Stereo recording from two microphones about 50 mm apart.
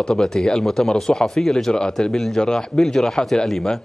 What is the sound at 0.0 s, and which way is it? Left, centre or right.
Speech, centre.